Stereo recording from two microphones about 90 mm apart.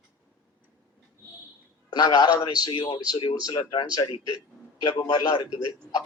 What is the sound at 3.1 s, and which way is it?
A man's voice, 60° left (ahead or behind).